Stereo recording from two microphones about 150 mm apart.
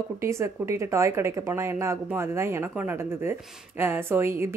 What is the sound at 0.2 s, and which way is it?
A woman's voice, 20° right (ahead or behind).